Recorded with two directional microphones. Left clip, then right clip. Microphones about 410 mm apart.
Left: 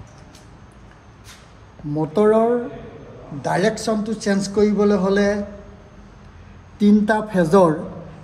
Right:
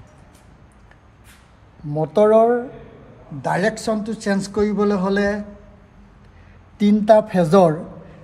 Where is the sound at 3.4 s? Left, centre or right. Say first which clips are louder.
Even; centre.